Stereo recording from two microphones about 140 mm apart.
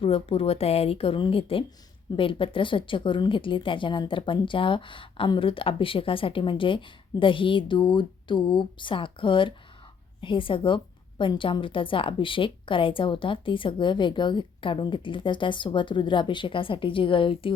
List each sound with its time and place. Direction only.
0.0 s a woman's voice: 45° left (ahead or behind)